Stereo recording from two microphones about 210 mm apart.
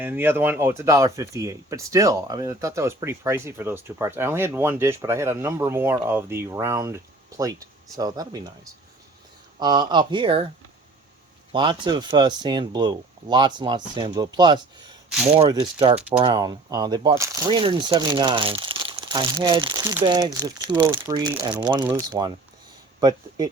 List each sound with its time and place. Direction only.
0.0 s speech: 10° right (ahead or behind)
11.5 s speech: 20° right (ahead or behind)